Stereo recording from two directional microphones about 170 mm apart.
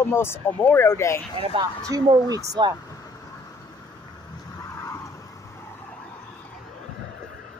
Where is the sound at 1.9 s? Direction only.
20° right (ahead or behind).